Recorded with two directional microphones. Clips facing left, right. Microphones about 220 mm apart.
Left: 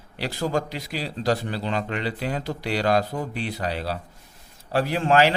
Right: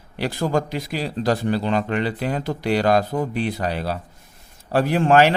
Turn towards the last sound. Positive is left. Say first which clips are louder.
# right 4 dB
turn(degrees=-50)  # may be behind; listen again after turning